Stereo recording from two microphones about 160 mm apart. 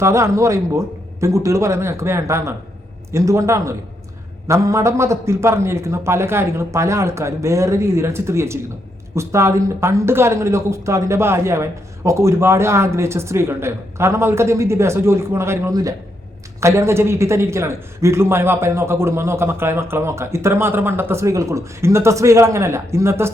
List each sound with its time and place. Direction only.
0.0 s a man's voice: 20° right (ahead or behind)